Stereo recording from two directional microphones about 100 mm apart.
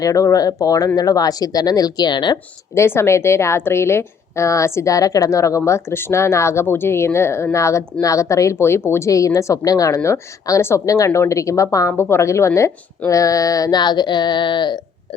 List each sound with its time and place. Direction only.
0.0 s a woman's voice: 35° left (ahead or behind)
2.7 s a woman's voice: 25° left (ahead or behind)
13.1 s a sound: 35° left (ahead or behind); by 14.8 s 50° left (ahead or behind)